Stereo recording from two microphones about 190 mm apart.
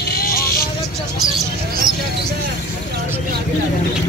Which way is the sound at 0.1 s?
50° left (ahead or behind).